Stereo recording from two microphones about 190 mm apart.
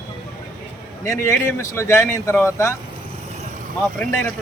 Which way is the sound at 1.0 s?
15° left (ahead or behind).